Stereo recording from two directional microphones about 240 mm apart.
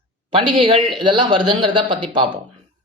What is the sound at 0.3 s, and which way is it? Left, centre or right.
Speech, right.